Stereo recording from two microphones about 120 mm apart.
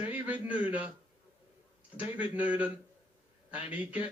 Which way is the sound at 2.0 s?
10° right (ahead or behind).